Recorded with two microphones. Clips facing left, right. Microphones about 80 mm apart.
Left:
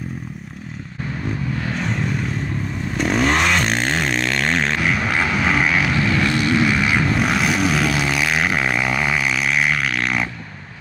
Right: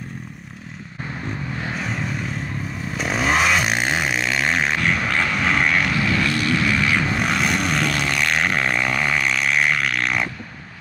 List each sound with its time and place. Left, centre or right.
1.8 s vehicle: centre
3.0 s a sound: centre
6.2 s vehicle: centre
7.2 s vehicle: centre